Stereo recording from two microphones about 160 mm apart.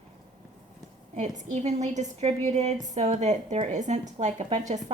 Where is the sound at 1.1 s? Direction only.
50° right (ahead or behind).